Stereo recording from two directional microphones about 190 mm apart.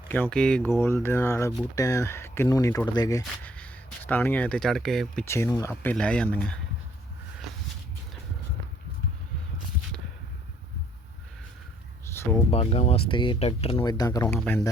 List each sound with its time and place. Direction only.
0.1 s speech: 5° left (ahead or behind)
5.2 s speech: 15° left (ahead or behind)
12.1 s a sound: 15° left (ahead or behind)
12.5 s speech: 35° left (ahead or behind)
14.3 s speech: 10° left (ahead or behind)